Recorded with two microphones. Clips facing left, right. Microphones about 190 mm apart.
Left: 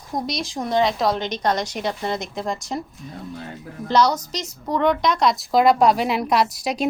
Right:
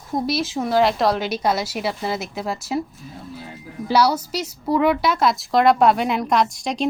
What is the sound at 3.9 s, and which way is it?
A woman's voice, 10° right (ahead or behind).